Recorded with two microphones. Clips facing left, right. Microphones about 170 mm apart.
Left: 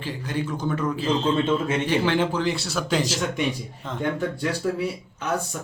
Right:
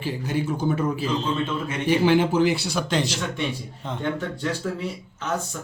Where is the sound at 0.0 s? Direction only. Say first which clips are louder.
Right 2 dB; 10° right (ahead or behind).